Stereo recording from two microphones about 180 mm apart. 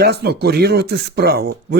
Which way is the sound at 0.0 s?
65° right (ahead or behind).